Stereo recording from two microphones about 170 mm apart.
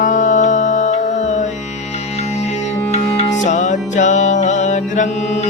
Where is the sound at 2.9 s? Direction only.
40° left (ahead or behind).